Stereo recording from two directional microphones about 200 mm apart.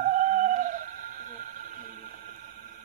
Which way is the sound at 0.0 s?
40° right (ahead or behind).